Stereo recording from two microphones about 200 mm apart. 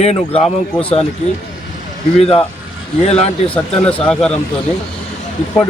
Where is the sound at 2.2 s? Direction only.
30° left (ahead or behind).